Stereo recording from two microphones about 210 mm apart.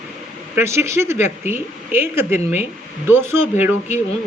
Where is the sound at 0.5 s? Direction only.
10° right (ahead or behind).